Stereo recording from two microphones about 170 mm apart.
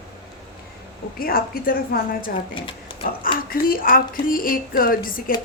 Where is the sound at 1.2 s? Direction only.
60° left (ahead or behind).